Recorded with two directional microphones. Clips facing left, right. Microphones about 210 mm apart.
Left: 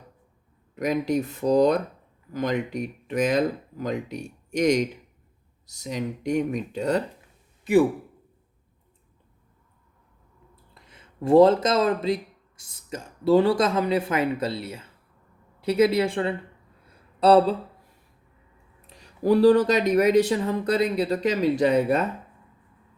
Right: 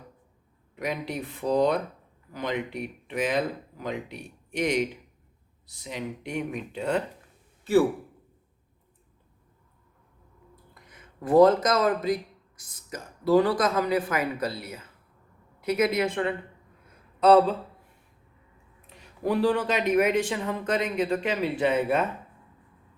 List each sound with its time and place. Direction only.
0.8 s speech: 45° left (ahead or behind)
7.6 s a man's voice: 15° left (ahead or behind)
10.5 s speech: 25° left (ahead or behind)
18.9 s speech: 35° left (ahead or behind)